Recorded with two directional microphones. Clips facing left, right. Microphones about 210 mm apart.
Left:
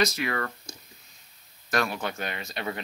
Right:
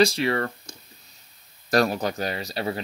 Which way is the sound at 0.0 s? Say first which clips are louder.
Right 6 dB; 30° right (ahead or behind).